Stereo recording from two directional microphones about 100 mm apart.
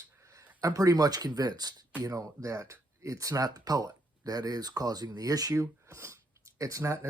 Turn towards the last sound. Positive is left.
turn(degrees=-30)  # may be behind; listen again after turning